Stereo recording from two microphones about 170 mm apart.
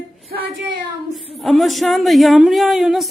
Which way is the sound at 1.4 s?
Centre (ahead or behind).